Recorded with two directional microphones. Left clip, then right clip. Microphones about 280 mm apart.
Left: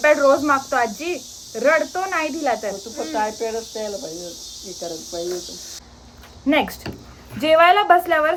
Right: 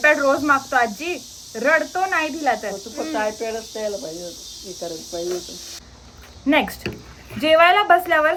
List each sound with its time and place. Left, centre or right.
0.0 s speech: centre
2.9 s speech: centre
6.4 s speech: centre